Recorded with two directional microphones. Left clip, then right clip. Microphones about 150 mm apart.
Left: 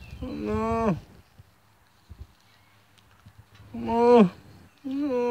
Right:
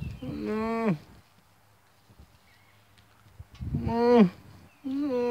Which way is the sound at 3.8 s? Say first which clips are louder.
Left 4 dB; 5° left (ahead or behind).